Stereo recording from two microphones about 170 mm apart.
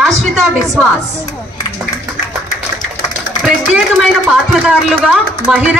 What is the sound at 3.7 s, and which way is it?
Speech, centre (ahead or behind).